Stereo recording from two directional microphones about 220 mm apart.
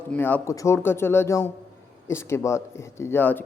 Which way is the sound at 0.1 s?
5° left (ahead or behind).